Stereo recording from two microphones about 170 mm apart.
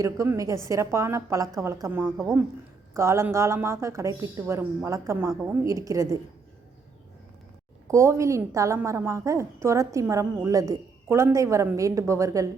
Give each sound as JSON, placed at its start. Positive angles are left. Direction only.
{"t": 0.0, "sound": "a woman's voice", "side_deg": -20}
{"t": 5.3, "sound": "a woman's voice", "side_deg": -5}
{"t": 5.6, "sound": "a woman's voice", "side_deg": -20}
{"t": 7.9, "sound": "a woman's voice", "side_deg": -15}